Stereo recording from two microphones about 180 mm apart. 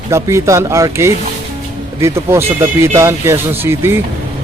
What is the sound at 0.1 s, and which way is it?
Speech, 15° right (ahead or behind).